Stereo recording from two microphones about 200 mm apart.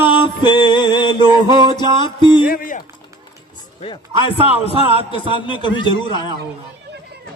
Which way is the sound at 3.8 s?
25° left (ahead or behind).